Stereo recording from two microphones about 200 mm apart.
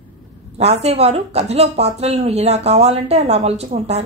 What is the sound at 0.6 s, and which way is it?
A woman's voice, 30° right (ahead or behind).